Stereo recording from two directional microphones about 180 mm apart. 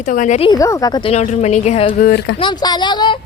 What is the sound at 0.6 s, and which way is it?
Speech, 20° left (ahead or behind).